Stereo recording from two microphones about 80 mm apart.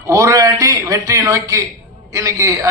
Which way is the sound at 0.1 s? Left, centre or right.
Right.